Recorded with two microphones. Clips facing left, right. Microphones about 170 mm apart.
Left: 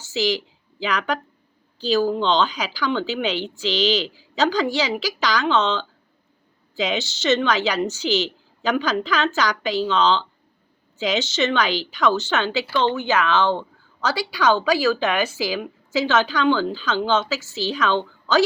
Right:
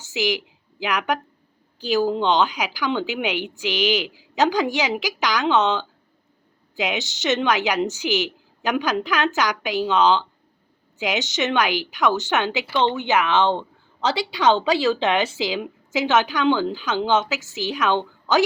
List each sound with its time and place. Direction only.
0.0 s a woman's voice: 15° right (ahead or behind)